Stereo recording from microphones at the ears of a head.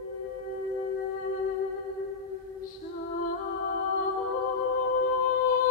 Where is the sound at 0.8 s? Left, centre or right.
Left.